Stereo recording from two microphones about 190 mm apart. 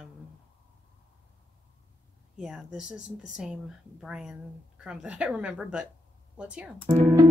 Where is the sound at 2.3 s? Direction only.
5° right (ahead or behind).